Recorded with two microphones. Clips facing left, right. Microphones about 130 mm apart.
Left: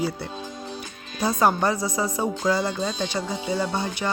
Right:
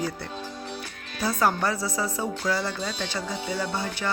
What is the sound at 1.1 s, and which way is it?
Speech, 20° left (ahead or behind).